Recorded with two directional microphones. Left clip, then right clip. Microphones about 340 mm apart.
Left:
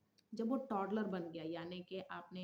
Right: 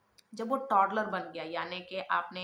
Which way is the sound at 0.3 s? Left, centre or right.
Left.